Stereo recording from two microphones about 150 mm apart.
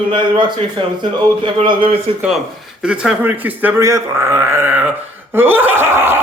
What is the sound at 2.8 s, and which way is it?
A man's voice, 5° right (ahead or behind).